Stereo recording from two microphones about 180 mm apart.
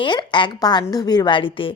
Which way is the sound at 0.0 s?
25° left (ahead or behind).